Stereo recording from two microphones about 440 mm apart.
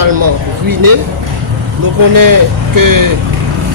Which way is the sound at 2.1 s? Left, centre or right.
Right.